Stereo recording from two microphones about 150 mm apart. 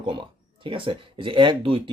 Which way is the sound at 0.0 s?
35° right (ahead or behind).